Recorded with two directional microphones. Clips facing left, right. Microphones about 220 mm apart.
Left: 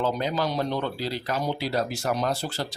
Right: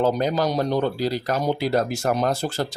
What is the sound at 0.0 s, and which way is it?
Speech, 45° right (ahead or behind).